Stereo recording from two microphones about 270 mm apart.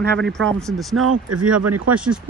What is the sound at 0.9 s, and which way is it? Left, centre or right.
Speech, right.